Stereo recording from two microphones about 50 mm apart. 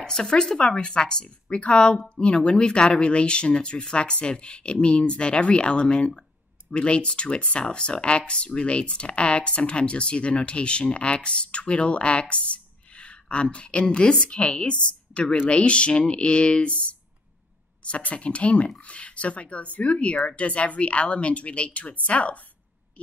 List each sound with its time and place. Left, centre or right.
0.0 s speech: centre